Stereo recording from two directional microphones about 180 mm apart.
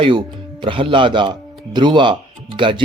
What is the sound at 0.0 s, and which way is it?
Speech, 25° right (ahead or behind).